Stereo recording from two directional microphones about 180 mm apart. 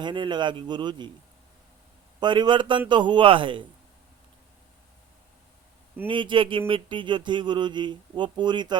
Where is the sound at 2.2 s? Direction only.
25° right (ahead or behind).